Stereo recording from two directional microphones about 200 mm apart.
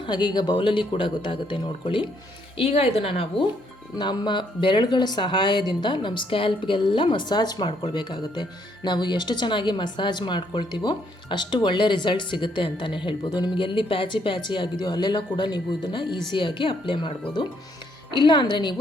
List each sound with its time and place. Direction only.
0.0 s speech: 20° left (ahead or behind)